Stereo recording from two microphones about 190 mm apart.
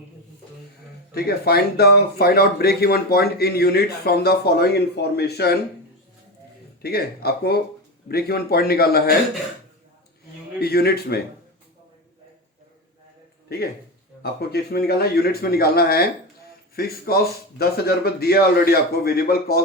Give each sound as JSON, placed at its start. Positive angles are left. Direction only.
{"t": 1.1, "sound": "speech", "side_deg": 55}
{"t": 6.8, "sound": "speech", "side_deg": 55}
{"t": 10.6, "sound": "speech", "side_deg": 55}
{"t": 14.2, "sound": "a man's voice", "side_deg": 55}